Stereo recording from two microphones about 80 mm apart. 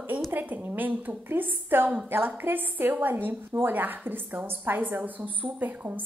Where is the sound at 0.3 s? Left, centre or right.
Right.